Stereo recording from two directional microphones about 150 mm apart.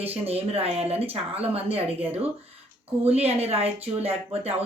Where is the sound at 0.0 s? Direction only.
40° right (ahead or behind).